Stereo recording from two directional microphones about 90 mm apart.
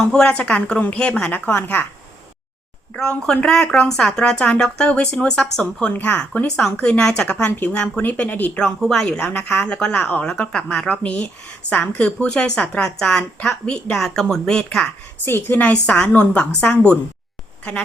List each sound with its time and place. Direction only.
0.0 s a woman's voice: 10° left (ahead or behind)
2.9 s a woman's voice: 10° left (ahead or behind)
8.6 s a woman's voice: 5° left (ahead or behind)
15.2 s a woman's voice: 25° left (ahead or behind)